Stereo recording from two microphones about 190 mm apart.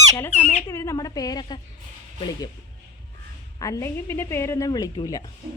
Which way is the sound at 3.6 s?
15° left (ahead or behind).